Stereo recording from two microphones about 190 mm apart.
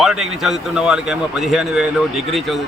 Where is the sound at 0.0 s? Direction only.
Centre (ahead or behind).